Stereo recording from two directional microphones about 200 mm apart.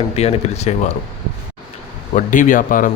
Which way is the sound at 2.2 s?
40° left (ahead or behind).